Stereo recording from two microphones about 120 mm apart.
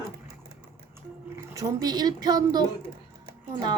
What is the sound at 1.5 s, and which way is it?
A woman's voice, 30° right (ahead or behind).